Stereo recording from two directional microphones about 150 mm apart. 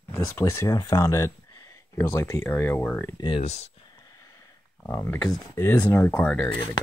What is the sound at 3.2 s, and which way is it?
Speech, 35° left (ahead or behind).